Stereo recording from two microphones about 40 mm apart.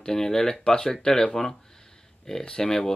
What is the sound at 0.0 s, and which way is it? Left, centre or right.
Speech, centre.